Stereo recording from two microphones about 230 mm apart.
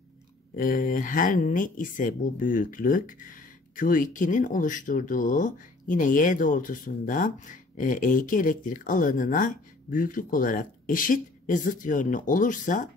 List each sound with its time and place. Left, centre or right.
0.6 s speech: left